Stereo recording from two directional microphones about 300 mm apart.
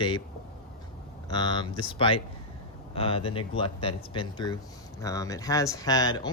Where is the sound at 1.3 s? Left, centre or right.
Centre.